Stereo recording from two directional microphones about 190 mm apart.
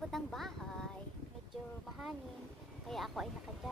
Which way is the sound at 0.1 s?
Centre (ahead or behind).